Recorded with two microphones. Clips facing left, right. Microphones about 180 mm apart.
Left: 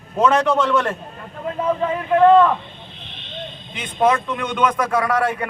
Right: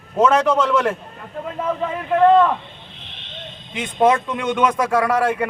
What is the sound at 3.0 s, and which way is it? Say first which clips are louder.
Vehicle: left 2 dB; 80° right.